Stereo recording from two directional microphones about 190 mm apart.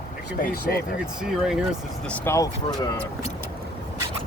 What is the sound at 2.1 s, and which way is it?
Speech, 15° left (ahead or behind).